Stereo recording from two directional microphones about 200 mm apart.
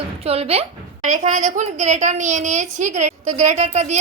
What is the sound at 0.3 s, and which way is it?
A woman's voice, 30° right (ahead or behind).